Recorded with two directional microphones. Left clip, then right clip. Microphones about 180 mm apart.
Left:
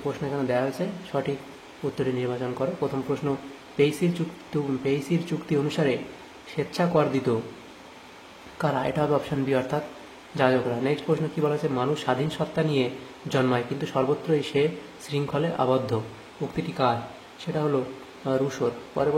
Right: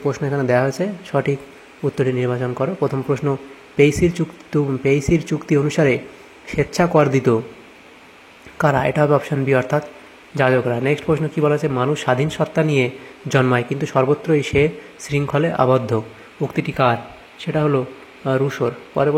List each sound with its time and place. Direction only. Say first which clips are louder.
0.0 s a man's voice: right 8 dB; 40° right (ahead or behind)
8.5 s a man's voice: right 9 dB; 35° right (ahead or behind)